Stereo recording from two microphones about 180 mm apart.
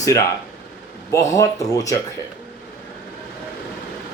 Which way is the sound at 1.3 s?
20° left (ahead or behind).